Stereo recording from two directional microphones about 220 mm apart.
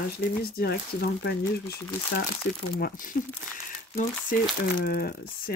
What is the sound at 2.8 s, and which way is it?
Speech, 40° left (ahead or behind).